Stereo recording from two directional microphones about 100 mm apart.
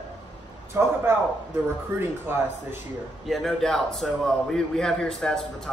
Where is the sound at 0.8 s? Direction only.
25° right (ahead or behind).